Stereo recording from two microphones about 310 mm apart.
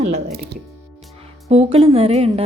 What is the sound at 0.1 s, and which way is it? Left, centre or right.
Speech, right.